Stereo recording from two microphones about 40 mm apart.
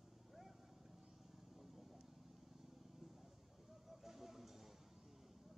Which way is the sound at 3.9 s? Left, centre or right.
Centre.